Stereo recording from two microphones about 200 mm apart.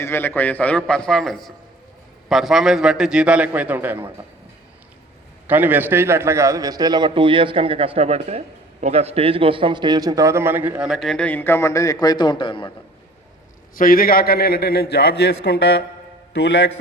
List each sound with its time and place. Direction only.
0.0 s a man's voice: 10° left (ahead or behind); by 4.0 s 10° right (ahead or behind)
5.5 s a man's voice: 10° right (ahead or behind); by 12.7 s 25° left (ahead or behind)
13.7 s a man's voice: 45° left (ahead or behind)